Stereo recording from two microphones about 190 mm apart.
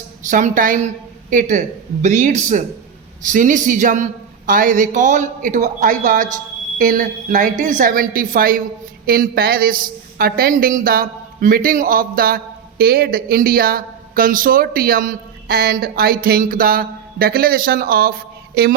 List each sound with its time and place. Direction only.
0.3 s a woman's voice: 40° right (ahead or behind)